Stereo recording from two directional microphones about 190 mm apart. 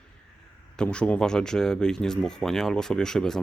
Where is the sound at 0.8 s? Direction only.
5° left (ahead or behind).